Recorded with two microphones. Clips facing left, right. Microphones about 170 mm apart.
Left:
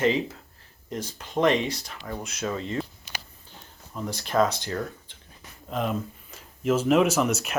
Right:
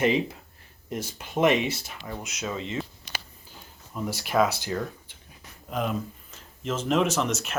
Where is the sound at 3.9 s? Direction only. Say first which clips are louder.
Even; 5° right (ahead or behind).